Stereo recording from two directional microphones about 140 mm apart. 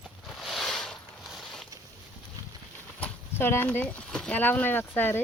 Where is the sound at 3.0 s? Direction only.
15° left (ahead or behind).